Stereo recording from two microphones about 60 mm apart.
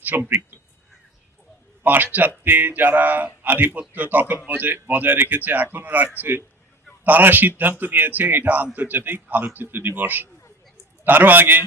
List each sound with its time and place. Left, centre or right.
0.0 s speech: right
1.8 s a man's voice: right